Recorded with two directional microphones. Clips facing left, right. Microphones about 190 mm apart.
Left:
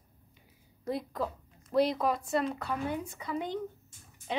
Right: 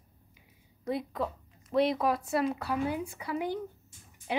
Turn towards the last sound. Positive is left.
turn(degrees=-10)  # may be behind; listen again after turning